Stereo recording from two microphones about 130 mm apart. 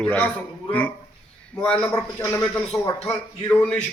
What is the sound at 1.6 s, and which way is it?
Speech, 10° left (ahead or behind).